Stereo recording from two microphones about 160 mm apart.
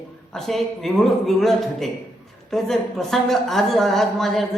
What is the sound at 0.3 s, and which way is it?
A woman's voice, centre (ahead or behind).